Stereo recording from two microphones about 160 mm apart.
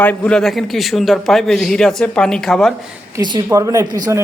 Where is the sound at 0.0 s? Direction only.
10° left (ahead or behind).